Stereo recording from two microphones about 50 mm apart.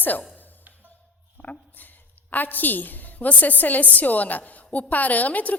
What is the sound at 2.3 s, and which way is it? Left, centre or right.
A woman's voice, left.